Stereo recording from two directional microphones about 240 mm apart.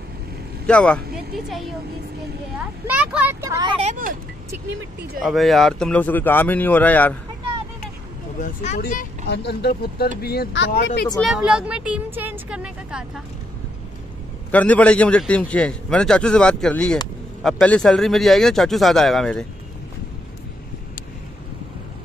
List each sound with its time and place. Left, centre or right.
0.7 s speech: centre
2.9 s a man's voice: centre
3.4 s speech: centre; by 4.2 s right
5.2 s speech: centre
8.4 s speech: left
11.1 s a man's voice: centre
14.5 s a man's voice: centre